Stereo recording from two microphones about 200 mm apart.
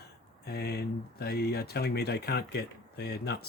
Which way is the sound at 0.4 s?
55° left (ahead or behind).